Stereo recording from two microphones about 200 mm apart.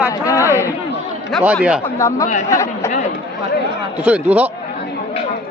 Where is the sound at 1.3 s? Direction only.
5° right (ahead or behind).